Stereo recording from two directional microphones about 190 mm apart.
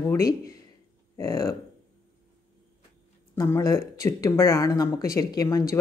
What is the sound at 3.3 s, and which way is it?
Speech, 15° left (ahead or behind).